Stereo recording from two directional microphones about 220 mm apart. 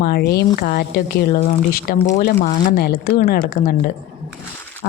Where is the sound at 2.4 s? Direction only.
45° left (ahead or behind).